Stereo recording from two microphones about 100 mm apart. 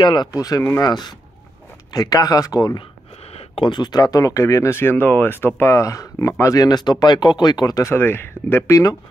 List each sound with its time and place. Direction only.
0.0 s speech: 50° left (ahead or behind)
0.3 s speech: 35° left (ahead or behind)
0.8 s speech: 45° left (ahead or behind)
3.3 s a sound: 70° left (ahead or behind)
3.7 s speech: 45° left (ahead or behind); by 5.5 s 20° left (ahead or behind)
5.6 s speech: 30° left (ahead or behind)
7.8 s speech: 25° left (ahead or behind)